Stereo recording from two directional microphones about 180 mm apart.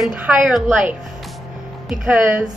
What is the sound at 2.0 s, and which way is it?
Speech, 5° right (ahead or behind).